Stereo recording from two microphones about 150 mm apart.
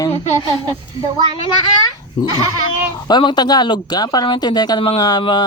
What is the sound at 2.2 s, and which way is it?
Speech, 40° left (ahead or behind).